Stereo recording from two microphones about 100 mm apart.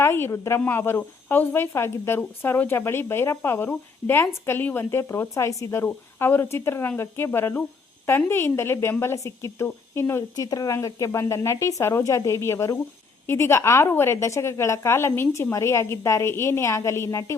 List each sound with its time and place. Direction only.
0.0 s speech: 25° left (ahead or behind)
10.3 s speech: 40° left (ahead or behind)